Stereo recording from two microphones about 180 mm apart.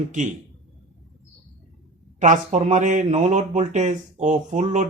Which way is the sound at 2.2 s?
40° right (ahead or behind).